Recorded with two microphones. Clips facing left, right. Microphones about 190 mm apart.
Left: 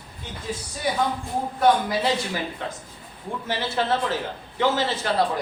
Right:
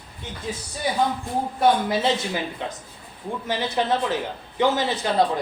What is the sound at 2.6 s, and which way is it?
Speech, 15° right (ahead or behind).